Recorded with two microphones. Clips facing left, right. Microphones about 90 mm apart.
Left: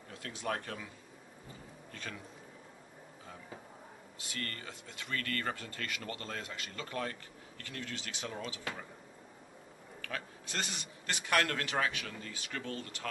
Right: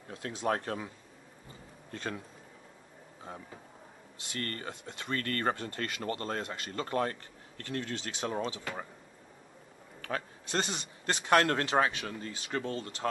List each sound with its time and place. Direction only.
0.1 s speech: 25° right (ahead or behind)
1.9 s speech: 35° right (ahead or behind)
4.4 s speech: 40° right (ahead or behind)
10.0 s speech: 35° right (ahead or behind)